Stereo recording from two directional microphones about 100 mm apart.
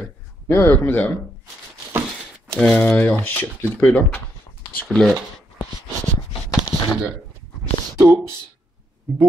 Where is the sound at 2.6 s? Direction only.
10° left (ahead or behind).